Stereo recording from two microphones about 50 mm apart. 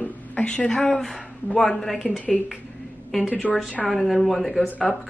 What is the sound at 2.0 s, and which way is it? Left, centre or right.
Speech, left.